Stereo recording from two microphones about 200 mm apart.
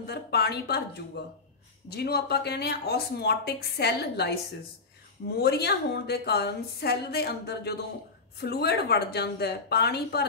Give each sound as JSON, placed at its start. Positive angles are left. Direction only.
{"t": 0.0, "sound": "speech", "side_deg": 55}
{"t": 5.4, "sound": "a woman's voice", "side_deg": 55}